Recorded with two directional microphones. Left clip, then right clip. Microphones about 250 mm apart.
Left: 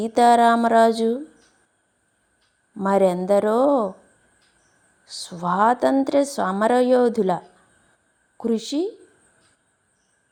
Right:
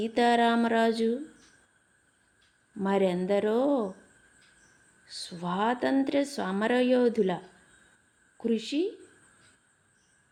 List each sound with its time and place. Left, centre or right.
0.0 s a woman's voice: centre
2.7 s a woman's voice: centre
5.0 s a woman's voice: centre
8.4 s a woman's voice: centre